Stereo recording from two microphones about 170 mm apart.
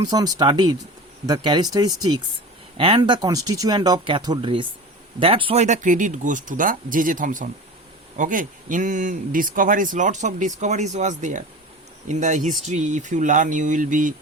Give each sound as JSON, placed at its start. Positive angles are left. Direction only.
{"t": 0.0, "sound": "speech", "side_deg": -20}